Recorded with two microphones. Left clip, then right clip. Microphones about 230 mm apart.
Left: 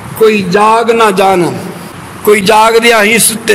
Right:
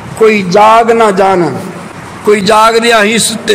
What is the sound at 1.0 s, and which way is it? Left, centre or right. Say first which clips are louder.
Speech: even; left.